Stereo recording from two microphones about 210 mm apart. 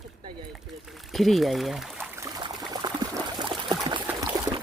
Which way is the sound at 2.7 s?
20° right (ahead or behind).